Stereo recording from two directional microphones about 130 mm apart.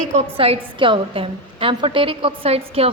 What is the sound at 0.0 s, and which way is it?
A woman's voice, 55° right (ahead or behind).